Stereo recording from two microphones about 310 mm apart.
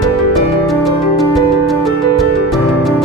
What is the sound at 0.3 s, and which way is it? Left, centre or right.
Music, centre.